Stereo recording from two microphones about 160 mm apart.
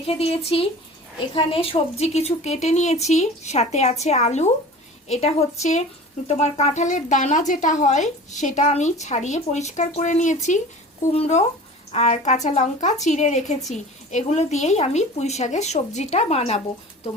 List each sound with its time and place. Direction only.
0.1 s a woman's voice: 35° left (ahead or behind)